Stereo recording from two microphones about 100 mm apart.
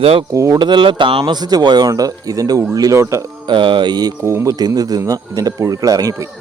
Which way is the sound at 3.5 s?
55° right (ahead or behind).